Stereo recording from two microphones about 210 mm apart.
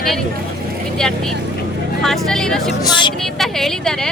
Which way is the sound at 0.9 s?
5° left (ahead or behind).